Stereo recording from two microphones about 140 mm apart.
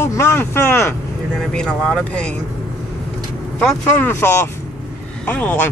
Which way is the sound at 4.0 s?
15° left (ahead or behind).